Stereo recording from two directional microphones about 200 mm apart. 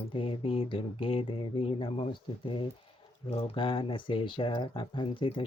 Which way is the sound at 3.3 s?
25° left (ahead or behind).